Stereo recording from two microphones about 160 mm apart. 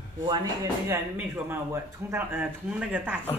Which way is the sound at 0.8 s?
15° right (ahead or behind).